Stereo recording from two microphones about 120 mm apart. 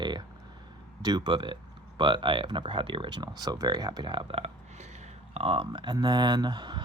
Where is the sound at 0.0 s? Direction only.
40° right (ahead or behind).